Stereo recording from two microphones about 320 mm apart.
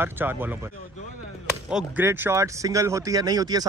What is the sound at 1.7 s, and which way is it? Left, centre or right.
Speech, centre.